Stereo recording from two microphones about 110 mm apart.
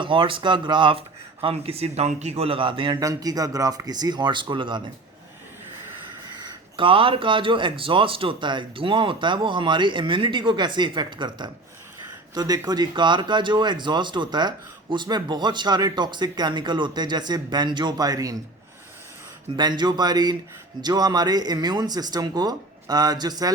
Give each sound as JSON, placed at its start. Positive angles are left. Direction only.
{"t": 0.0, "sound": "speech", "side_deg": -50}
{"t": 3.0, "sound": "speech", "side_deg": -35}
{"t": 6.4, "sound": "speech", "side_deg": -50}
{"t": 19.5, "sound": "speech", "side_deg": -40}